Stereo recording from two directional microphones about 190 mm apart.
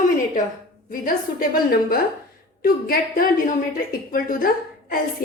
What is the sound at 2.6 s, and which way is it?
A woman's voice, 50° left (ahead or behind).